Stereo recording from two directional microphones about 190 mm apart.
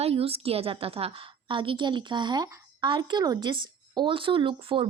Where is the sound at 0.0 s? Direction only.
30° right (ahead or behind).